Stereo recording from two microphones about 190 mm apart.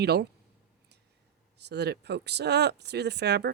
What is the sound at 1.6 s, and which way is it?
Speech, 60° right (ahead or behind).